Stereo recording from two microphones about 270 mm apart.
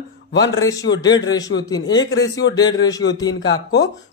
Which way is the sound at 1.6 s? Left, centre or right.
Centre.